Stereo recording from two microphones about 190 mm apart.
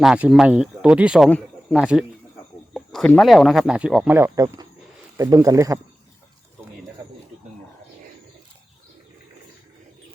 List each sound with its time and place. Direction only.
0.0 s speech: 5° right (ahead or behind)